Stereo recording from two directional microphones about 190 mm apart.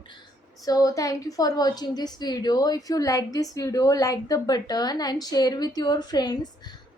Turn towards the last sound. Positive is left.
turn(degrees=20)  # may be behind; listen again after turning